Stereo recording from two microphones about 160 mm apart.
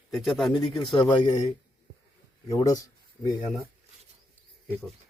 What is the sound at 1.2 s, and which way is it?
Speech, 35° left (ahead or behind).